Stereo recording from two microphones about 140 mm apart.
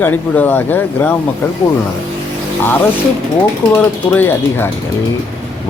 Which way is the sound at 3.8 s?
10° left (ahead or behind).